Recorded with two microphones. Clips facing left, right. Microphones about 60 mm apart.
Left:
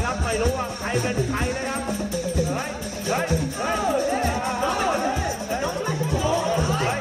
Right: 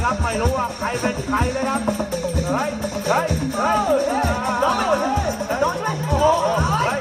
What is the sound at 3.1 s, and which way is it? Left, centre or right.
Music, right.